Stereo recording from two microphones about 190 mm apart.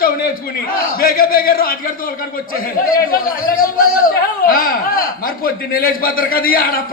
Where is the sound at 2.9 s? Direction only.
50° left (ahead or behind).